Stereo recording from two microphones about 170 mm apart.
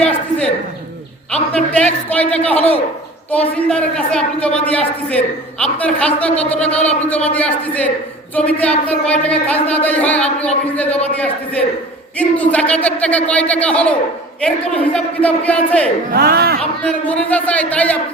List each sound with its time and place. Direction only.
0.0 s a sound: 5° left (ahead or behind)
1.3 s a woman's voice: 10° left (ahead or behind)
16.1 s speech: 65° right (ahead or behind)
16.6 s a woman's voice: 5° left (ahead or behind)